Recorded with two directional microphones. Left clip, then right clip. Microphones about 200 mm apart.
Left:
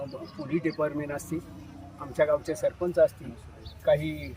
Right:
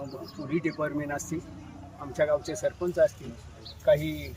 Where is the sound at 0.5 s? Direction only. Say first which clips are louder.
Left 1 dB; 5° left (ahead or behind).